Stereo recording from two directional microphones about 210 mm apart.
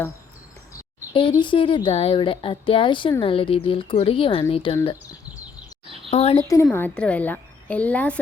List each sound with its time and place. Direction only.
0.7 s speech: 20° left (ahead or behind)
6.1 s speech: 30° left (ahead or behind)
6.5 s a woman's voice: 10° left (ahead or behind)